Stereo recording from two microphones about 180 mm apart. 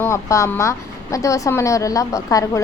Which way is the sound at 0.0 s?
15° left (ahead or behind).